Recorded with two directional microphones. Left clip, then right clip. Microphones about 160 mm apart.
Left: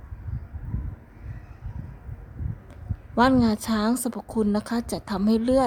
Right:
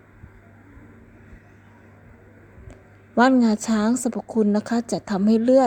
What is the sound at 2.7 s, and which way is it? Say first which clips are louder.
A woman's voice: right 5 dB; 15° right (ahead or behind).